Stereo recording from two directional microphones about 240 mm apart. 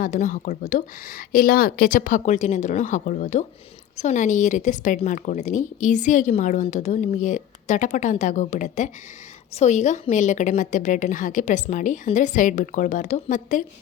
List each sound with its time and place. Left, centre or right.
0.0 s a woman's voice: left